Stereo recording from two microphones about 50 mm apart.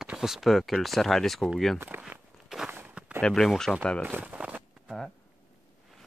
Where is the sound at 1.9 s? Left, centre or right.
Right.